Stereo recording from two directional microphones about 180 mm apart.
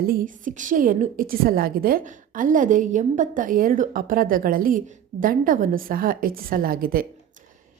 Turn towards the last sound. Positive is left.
turn(degrees=-55)  # may be behind; listen again after turning